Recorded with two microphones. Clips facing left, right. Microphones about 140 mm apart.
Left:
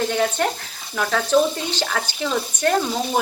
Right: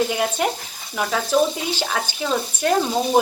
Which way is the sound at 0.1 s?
10° right (ahead or behind).